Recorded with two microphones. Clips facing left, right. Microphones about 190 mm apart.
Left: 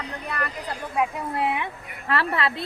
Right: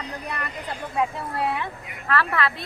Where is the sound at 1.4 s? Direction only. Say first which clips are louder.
Even; 20° left (ahead or behind).